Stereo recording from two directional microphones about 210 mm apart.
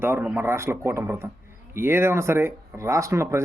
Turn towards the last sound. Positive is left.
turn(degrees=-15)  # may be behind; listen again after turning